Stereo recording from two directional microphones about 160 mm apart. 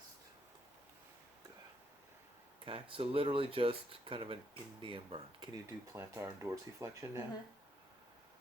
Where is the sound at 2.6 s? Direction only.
35° right (ahead or behind).